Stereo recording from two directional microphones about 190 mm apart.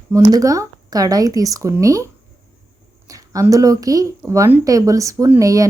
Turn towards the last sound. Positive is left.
turn(degrees=-15)  # may be behind; listen again after turning